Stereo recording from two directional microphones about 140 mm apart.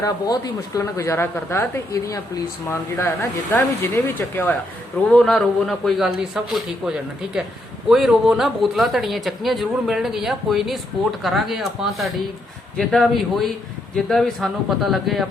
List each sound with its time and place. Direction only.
0.0 s a woman's voice: 25° left (ahead or behind); by 15.3 s centre (ahead or behind)